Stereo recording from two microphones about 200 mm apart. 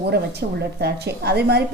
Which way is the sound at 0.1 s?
55° right (ahead or behind).